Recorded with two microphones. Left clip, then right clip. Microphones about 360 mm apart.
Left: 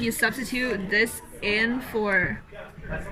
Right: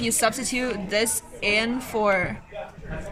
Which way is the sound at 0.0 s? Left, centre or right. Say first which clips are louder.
Right 2 dB; centre.